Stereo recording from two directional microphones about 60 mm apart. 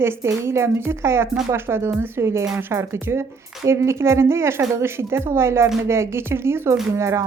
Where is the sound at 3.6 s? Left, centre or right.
Right.